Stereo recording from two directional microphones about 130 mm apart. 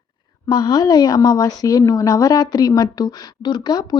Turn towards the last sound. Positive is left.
turn(degrees=30)  # may be behind; listen again after turning